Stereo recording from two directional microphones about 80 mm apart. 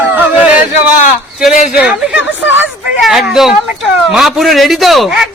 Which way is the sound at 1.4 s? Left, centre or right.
Centre.